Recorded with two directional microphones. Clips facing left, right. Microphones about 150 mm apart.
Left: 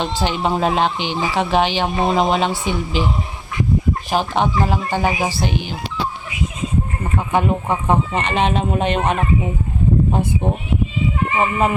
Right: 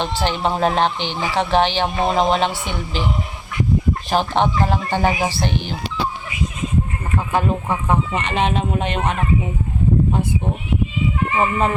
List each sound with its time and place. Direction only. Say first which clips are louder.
0.0 s speech: even; 15° left (ahead or behind)
4.1 s speech: right 1 dB; 10° left (ahead or behind)
7.0 s speech: left 3 dB; 20° left (ahead or behind)
11.2 s speech: left 1 dB; 20° left (ahead or behind)